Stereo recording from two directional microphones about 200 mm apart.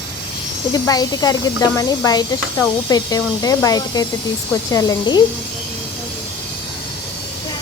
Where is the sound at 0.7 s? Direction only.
20° left (ahead or behind).